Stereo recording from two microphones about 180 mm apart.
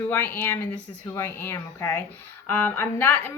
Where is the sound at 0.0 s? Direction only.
10° left (ahead or behind).